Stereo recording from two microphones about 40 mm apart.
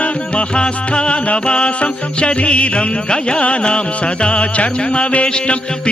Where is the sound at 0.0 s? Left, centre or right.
Left.